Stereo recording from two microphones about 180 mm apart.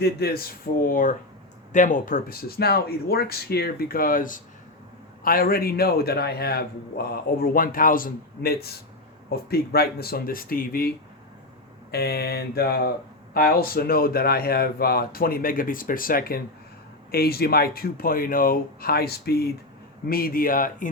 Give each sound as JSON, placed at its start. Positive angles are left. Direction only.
{"t": 0.0, "sound": "a man's voice", "side_deg": 60}